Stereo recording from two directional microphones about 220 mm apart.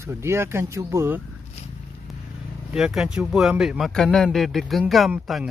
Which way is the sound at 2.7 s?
Centre (ahead or behind).